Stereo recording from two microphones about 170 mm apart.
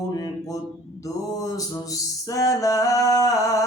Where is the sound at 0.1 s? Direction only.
20° left (ahead or behind).